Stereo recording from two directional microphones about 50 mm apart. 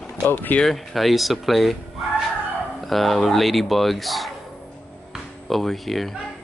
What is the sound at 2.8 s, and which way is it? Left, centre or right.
Speech, centre.